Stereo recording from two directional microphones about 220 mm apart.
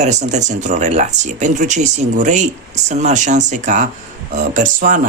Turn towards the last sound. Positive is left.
turn(degrees=-35)  # may be behind; listen again after turning